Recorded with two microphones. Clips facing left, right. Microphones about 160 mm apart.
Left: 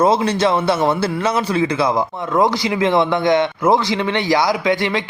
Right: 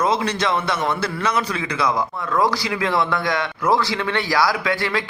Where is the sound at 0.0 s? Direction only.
30° left (ahead or behind).